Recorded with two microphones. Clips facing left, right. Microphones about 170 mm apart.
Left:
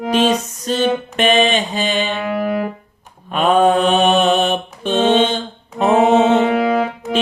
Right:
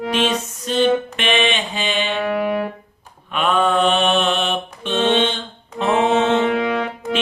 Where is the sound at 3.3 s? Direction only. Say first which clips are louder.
Left 5 dB; 40° left (ahead or behind).